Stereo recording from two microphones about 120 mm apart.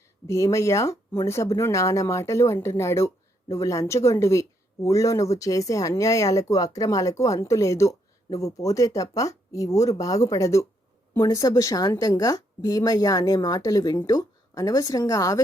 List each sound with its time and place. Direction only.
0.3 s a woman's voice: 25° left (ahead or behind)